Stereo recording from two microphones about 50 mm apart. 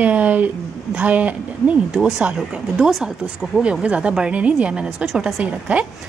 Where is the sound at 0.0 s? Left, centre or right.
Right.